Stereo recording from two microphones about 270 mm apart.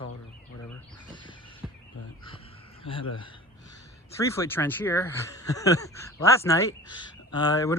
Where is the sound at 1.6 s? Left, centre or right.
Centre.